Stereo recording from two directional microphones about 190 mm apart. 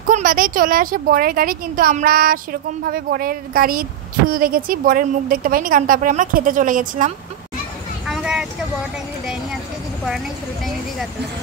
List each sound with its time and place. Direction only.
0.1 s speech: 45° right (ahead or behind)
8.1 s vehicle: 5° right (ahead or behind)